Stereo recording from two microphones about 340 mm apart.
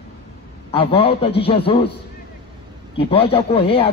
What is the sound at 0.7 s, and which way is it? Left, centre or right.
A man's voice, centre.